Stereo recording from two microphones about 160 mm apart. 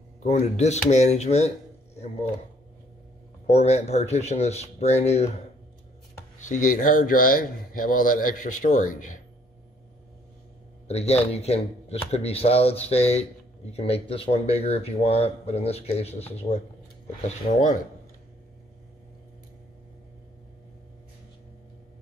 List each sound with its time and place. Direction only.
0.2 s speech: 45° left (ahead or behind)
3.4 s speech: 40° left (ahead or behind)
6.4 s speech: 50° left (ahead or behind)
10.9 s speech: 40° left (ahead or behind)
17.6 s speech: 50° left (ahead or behind)